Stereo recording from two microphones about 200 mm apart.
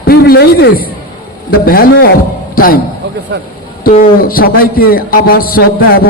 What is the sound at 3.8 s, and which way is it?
A man's voice, 45° left (ahead or behind).